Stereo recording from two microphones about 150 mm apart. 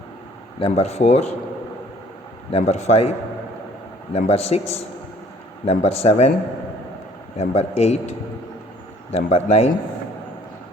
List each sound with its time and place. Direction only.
0.6 s a man's voice: 45° left (ahead or behind)
2.5 s a man's voice: 45° left (ahead or behind)
4.1 s a man's voice: 45° left (ahead or behind)
5.6 s a man's voice: 45° left (ahead or behind)
7.3 s a man's voice: 45° left (ahead or behind)
9.1 s a man's voice: 45° left (ahead or behind)